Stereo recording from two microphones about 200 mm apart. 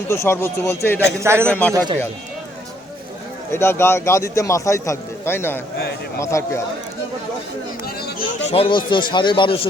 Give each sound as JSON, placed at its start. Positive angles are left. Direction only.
{"t": 0.1, "sound": "a man's voice", "side_deg": 15}
{"t": 1.2, "sound": "a man's voice", "side_deg": -10}
{"t": 1.5, "sound": "a man's voice", "side_deg": 5}
{"t": 3.5, "sound": "a man's voice", "side_deg": 10}
{"t": 7.9, "sound": "speech", "side_deg": 50}
{"t": 8.4, "sound": "speech", "side_deg": 30}